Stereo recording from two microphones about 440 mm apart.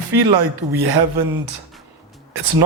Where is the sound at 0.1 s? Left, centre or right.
Right.